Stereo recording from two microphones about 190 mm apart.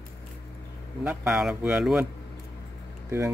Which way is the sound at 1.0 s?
5° right (ahead or behind).